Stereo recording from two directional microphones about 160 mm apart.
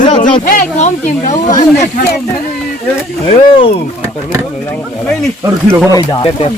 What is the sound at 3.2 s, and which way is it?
Speech, 35° left (ahead or behind).